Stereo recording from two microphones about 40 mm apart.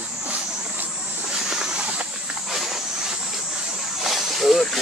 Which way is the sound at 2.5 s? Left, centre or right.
Centre.